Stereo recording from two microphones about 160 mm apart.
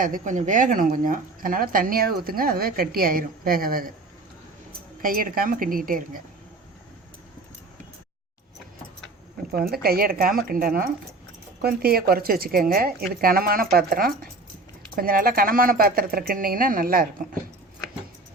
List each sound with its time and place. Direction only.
0.0 s speech: 55° right (ahead or behind)
5.0 s speech: 60° right (ahead or behind)
9.5 s a woman's voice: 70° right (ahead or behind)